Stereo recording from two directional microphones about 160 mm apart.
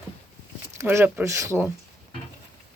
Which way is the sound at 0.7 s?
15° right (ahead or behind).